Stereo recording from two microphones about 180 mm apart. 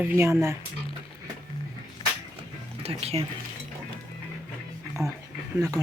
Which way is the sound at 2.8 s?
35° right (ahead or behind).